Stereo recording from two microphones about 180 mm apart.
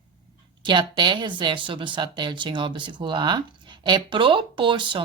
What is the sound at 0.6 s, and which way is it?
Speech, 25° right (ahead or behind).